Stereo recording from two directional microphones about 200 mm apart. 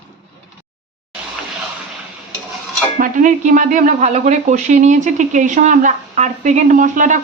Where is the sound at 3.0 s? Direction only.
40° right (ahead or behind).